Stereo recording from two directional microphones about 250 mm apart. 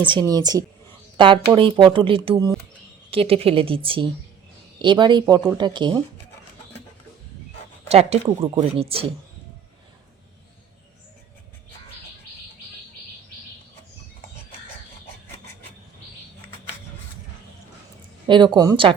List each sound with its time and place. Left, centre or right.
0.3 s speech: centre
5.2 s speech: centre
5.5 s speech: centre
7.9 s speech: right
18.3 s speech: centre